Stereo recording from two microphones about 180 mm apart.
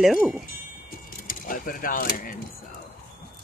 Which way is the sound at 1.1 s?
50° left (ahead or behind).